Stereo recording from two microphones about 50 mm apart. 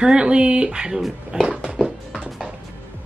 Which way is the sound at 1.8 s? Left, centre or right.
Centre.